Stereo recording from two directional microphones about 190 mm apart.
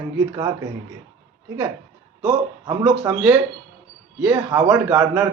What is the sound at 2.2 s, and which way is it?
Speech, 15° right (ahead or behind).